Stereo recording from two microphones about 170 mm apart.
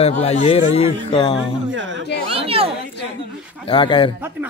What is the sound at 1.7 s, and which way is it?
Speech, 90° right.